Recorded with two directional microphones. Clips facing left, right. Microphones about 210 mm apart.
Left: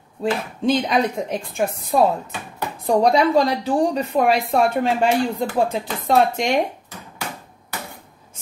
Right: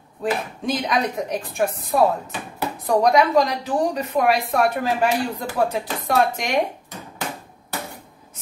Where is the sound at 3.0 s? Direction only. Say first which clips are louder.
Left 1 dB; 30° left (ahead or behind).